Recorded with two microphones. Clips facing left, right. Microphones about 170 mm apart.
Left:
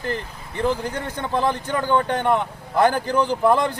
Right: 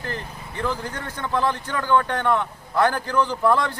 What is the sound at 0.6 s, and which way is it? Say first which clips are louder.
Speech: left 5 dB; 20° left (ahead or behind).